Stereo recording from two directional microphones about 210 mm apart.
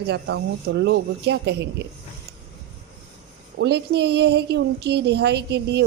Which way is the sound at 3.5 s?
55° right (ahead or behind).